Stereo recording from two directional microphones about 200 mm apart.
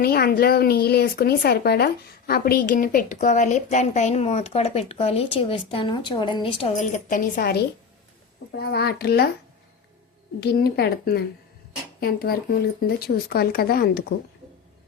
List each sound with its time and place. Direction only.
0.0 s speech: 50° left (ahead or behind)
10.4 s speech: 55° left (ahead or behind)